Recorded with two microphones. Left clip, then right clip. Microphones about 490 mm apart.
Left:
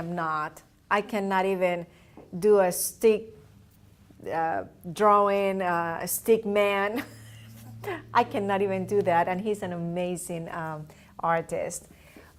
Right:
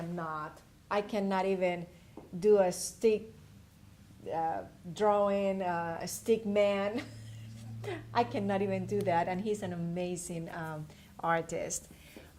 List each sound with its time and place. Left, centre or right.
0.2 s a woman's voice: left
4.3 s a woman's voice: left